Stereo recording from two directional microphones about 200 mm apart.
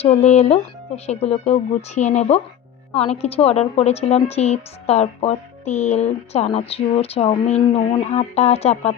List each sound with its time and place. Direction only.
0.0 s a woman's voice: 30° left (ahead or behind)